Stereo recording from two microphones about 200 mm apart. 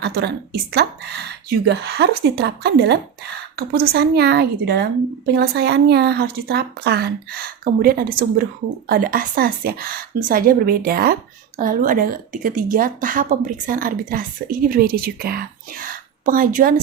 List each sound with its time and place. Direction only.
0.0 s a woman's voice: 55° right (ahead or behind)